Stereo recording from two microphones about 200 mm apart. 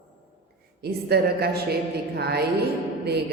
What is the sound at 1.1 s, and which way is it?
A woman's voice, 55° right (ahead or behind).